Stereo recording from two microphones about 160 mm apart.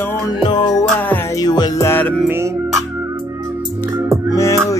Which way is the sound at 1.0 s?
10° left (ahead or behind).